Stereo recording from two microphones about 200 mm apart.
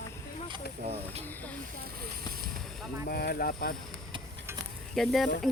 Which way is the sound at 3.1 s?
50° left (ahead or behind).